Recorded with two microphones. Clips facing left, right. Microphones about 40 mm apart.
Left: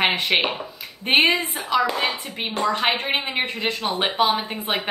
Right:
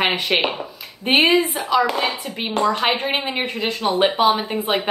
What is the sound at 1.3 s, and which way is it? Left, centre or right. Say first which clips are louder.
Speech: right 7 dB; right.